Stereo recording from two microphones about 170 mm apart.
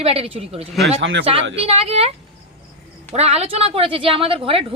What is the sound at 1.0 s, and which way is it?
Speech, 90° right.